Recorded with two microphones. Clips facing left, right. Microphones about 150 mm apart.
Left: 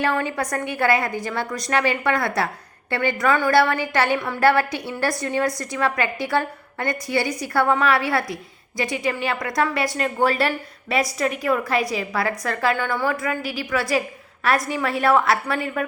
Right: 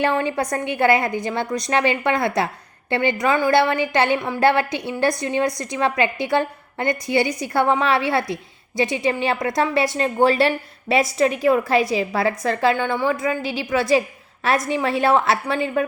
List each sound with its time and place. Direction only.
0.0 s a woman's voice: 25° right (ahead or behind)